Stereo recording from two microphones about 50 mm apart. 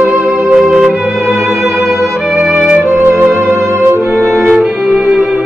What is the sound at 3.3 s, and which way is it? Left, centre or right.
Music, centre.